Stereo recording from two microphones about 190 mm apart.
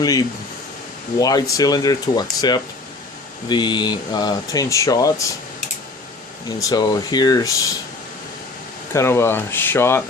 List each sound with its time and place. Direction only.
0.0 s speech: 20° left (ahead or behind)
6.6 s speech: 20° left (ahead or behind)
8.9 s speech: 15° left (ahead or behind)